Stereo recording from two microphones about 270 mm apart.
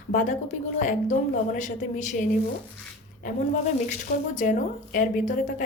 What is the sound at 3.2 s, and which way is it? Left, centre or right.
A woman's voice, left.